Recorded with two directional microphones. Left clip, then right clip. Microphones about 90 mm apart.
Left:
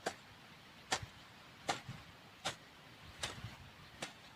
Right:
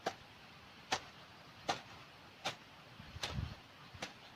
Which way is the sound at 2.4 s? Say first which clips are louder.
Even; 35° left (ahead or behind).